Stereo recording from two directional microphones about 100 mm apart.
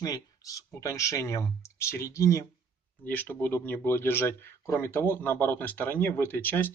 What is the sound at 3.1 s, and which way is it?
Speech, 20° left (ahead or behind).